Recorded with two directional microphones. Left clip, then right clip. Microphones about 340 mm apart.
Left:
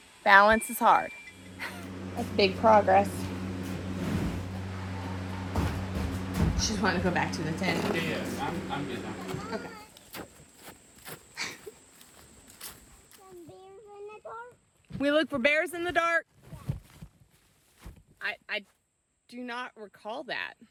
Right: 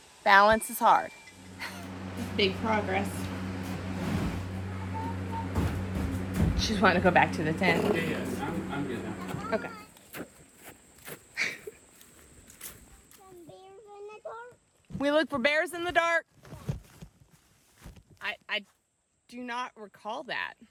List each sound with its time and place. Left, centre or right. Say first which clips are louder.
0.2 s speech: left 1 dB; centre
1.5 s vehicle: even; centre
2.2 s speech: left 2 dB; centre
2.6 s a woman's voice: left 9 dB; left
3.0 s a sound: left 6 dB; centre
3.8 s vehicle: even; centre
7.3 s speech: right 4 dB; centre
9.5 s a sound: right 5 dB; centre
14.9 s speech: even; centre
18.2 s a sound: even; centre
19.3 s speech: right 2 dB; centre